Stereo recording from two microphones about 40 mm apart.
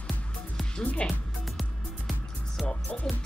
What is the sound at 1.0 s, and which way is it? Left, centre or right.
Speech, centre.